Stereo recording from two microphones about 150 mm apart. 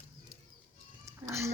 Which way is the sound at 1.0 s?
20° right (ahead or behind).